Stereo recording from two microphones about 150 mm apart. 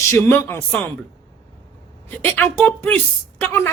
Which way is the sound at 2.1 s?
10° left (ahead or behind).